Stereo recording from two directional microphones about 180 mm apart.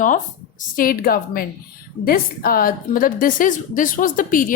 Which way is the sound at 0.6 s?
50° left (ahead or behind).